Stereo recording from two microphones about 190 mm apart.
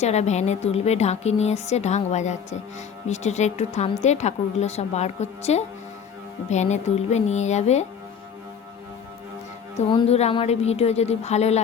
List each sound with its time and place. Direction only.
0.0 s a woman's voice: 35° left (ahead or behind)
9.9 s a woman's voice: 30° left (ahead or behind)